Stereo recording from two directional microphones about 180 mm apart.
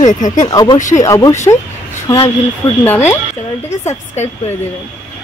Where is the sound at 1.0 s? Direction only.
20° left (ahead or behind).